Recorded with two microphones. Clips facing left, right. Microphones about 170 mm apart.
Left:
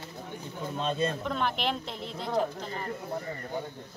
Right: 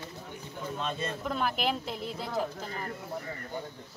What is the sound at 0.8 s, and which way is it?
Speech, 35° left (ahead or behind).